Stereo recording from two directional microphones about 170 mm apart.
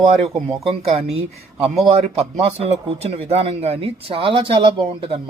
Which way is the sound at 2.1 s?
35° right (ahead or behind).